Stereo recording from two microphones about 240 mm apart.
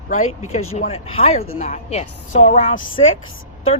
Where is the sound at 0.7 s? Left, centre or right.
Left.